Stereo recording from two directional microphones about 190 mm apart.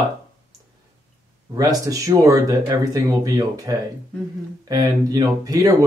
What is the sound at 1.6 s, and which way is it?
Speech, 20° right (ahead or behind).